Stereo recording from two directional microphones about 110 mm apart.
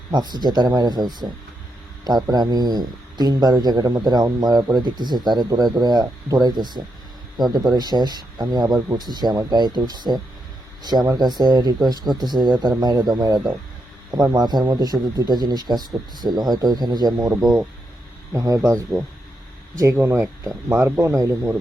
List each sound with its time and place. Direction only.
0.1 s a man's voice: 40° right (ahead or behind)
2.3 s a man's voice: 40° right (ahead or behind)
17.3 s speech: 15° right (ahead or behind)
18.3 s speech: 30° right (ahead or behind)
19.8 s speech: 25° right (ahead or behind)